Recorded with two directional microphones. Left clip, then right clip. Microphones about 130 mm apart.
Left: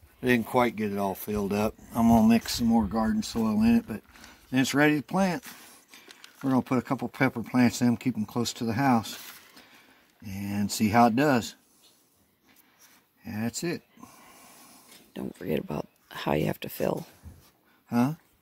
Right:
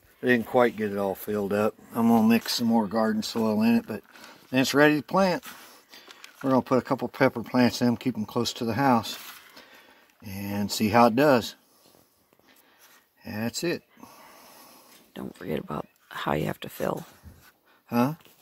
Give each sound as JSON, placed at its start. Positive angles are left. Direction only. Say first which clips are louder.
{"t": 0.2, "sound": "speech", "louder": "right 3 dB", "side_deg": 90}
{"t": 2.2, "sound": "speech", "louder": "right 1 dB", "side_deg": 50}
{"t": 2.7, "sound": "speech", "louder": "right 2 dB", "side_deg": 30}
{"t": 5.7, "sound": "a sound", "louder": "right 3 dB", "side_deg": 40}
{"t": 6.4, "sound": "speech", "louder": "right 4 dB", "side_deg": 40}
{"t": 10.2, "sound": "speech", "louder": "right 1 dB", "side_deg": 40}
{"t": 13.2, "sound": "a sound", "louder": "right 3 dB", "side_deg": 35}
{"t": 14.3, "sound": "hiss", "louder": "right 2 dB", "side_deg": 40}
{"t": 15.4, "sound": "speech", "louder": "left 1 dB", "side_deg": 15}
{"t": 17.8, "sound": "speech", "louder": "right 2 dB", "side_deg": 40}